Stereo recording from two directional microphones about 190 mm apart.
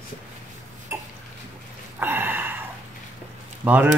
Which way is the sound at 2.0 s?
10° right (ahead or behind).